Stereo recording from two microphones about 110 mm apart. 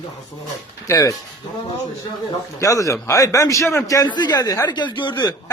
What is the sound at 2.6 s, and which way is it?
A man's voice, 30° left (ahead or behind).